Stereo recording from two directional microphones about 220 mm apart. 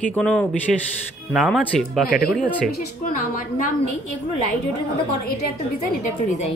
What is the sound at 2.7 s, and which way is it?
A woman's voice, 35° left (ahead or behind).